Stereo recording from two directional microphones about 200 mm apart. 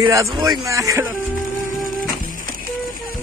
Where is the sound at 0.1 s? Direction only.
15° right (ahead or behind).